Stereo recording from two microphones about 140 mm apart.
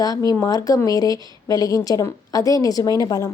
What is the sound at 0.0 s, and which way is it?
Speech, 25° left (ahead or behind).